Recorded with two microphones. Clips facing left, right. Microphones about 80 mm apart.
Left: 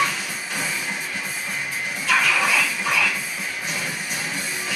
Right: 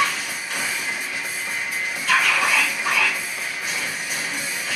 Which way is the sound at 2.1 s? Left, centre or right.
Centre.